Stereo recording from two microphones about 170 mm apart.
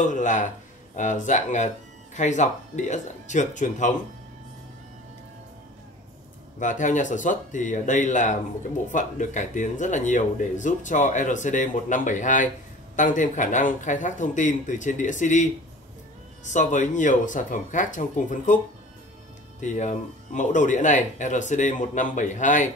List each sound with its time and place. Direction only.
0.0 s speech: 45° left (ahead or behind)
6.6 s speech: 45° left (ahead or behind)
19.6 s speech: 45° left (ahead or behind)